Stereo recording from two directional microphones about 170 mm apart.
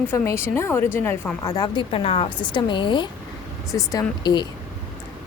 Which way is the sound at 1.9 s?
35° left (ahead or behind).